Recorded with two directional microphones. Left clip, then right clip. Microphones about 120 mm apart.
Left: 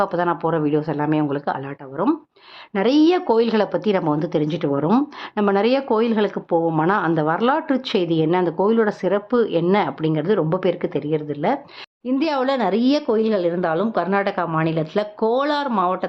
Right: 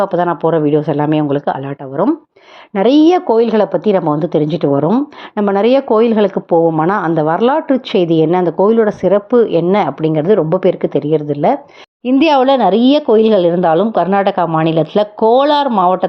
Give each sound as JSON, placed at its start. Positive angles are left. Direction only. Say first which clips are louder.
{"t": 0.0, "sound": "a woman's voice", "louder": "right 7 dB", "side_deg": -30}
{"t": 2.7, "sound": "a woman's voice", "louder": "right 7 dB", "side_deg": -35}
{"t": 12.0, "sound": "a woman's voice", "louder": "right 11 dB", "side_deg": -60}
{"t": 12.5, "sound": "a woman's voice", "louder": "right 9 dB", "side_deg": -35}
{"t": 13.1, "sound": "a woman's voice", "louder": "right 10 dB", "side_deg": -50}